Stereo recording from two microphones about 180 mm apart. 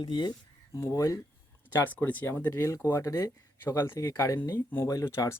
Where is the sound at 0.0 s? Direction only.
25° left (ahead or behind).